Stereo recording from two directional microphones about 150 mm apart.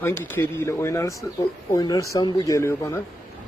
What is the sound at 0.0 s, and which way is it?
Speech, 15° left (ahead or behind).